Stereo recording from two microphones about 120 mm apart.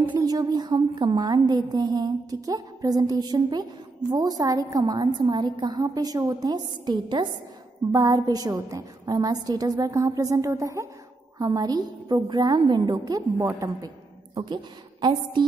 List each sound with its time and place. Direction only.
0.0 s a woman's voice: 35° right (ahead or behind)
13.4 s a woman's voice: 25° right (ahead or behind); by 15.4 s 40° right (ahead or behind)